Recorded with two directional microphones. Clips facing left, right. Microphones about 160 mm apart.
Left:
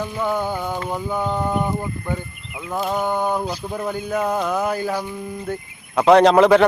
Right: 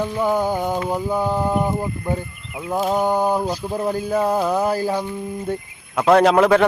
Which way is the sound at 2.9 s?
35° right (ahead or behind).